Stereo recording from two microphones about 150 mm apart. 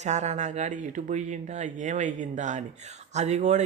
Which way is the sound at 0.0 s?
50° right (ahead or behind).